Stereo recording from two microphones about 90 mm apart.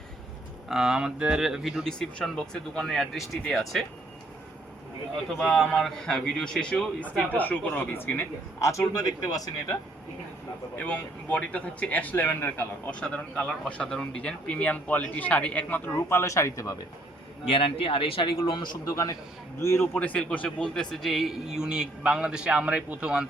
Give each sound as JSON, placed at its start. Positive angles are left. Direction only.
{"t": 0.7, "sound": "a man's voice", "side_deg": -5}
{"t": 1.8, "sound": "speech", "side_deg": 10}
{"t": 5.3, "sound": "speech", "side_deg": 5}
{"t": 7.0, "sound": "speech", "side_deg": 20}
{"t": 8.6, "sound": "speech", "side_deg": 35}
{"t": 10.8, "sound": "speech", "side_deg": 15}
{"t": 15.9, "sound": "speech", "side_deg": 25}
{"t": 17.5, "sound": "speech", "side_deg": 90}
{"t": 18.4, "sound": "a man's voice", "side_deg": 60}
{"t": 18.9, "sound": "speech", "side_deg": 35}
{"t": 20.1, "sound": "a man's voice", "side_deg": 15}